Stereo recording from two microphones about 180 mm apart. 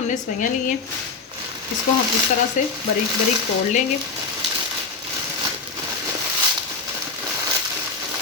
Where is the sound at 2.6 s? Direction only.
45° left (ahead or behind).